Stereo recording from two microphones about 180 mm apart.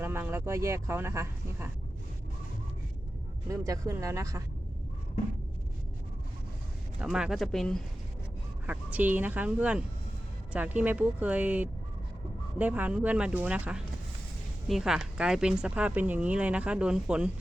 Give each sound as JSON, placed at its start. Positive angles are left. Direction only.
{"t": 0.0, "sound": "speech", "side_deg": -10}
{"t": 3.5, "sound": "speech", "side_deg": -15}
{"t": 7.0, "sound": "speech", "side_deg": -5}
{"t": 8.6, "sound": "speech", "side_deg": -10}